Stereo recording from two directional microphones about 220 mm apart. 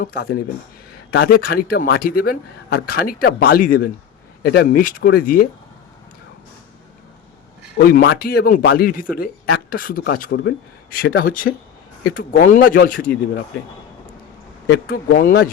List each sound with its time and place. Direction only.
0.0 s a man's voice: 40° left (ahead or behind)
7.8 s a man's voice: 40° left (ahead or behind)
14.7 s speech: 40° left (ahead or behind)